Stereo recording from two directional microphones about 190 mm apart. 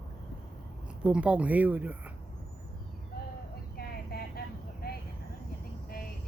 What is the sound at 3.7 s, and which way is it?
Vehicle, 55° left (ahead or behind).